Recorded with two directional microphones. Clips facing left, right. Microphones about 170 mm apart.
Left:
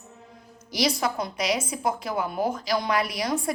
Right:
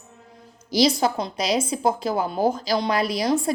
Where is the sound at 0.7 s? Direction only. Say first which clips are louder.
Right 6 dB; 30° right (ahead or behind).